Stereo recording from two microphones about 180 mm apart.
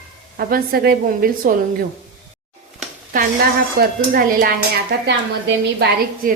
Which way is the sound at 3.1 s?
55° right (ahead or behind).